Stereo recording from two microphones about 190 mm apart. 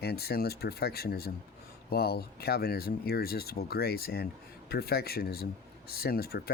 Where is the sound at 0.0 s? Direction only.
55° left (ahead or behind).